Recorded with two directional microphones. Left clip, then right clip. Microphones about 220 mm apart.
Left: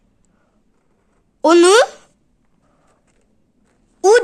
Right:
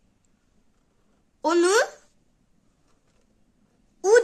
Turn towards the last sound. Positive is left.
turn(degrees=35)  # may be behind; listen again after turning